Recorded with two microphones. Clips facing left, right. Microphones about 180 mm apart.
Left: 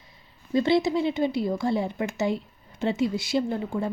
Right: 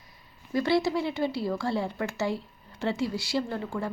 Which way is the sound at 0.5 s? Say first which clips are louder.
Left 3 dB; 20° left (ahead or behind).